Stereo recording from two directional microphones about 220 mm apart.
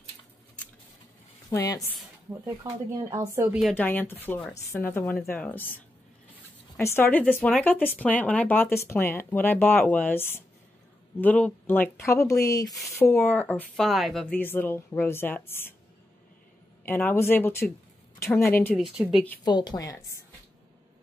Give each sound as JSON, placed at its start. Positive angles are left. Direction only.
{"t": 1.5, "sound": "speech", "side_deg": 15}
{"t": 2.4, "sound": "speech", "side_deg": -15}
{"t": 3.5, "sound": "speech", "side_deg": 5}
{"t": 6.8, "sound": "speech", "side_deg": 10}
{"t": 12.6, "sound": "speech", "side_deg": 0}
{"t": 16.8, "sound": "speech", "side_deg": 10}
{"t": 18.8, "sound": "speech", "side_deg": 0}
{"t": 19.4, "sound": "speech", "side_deg": 20}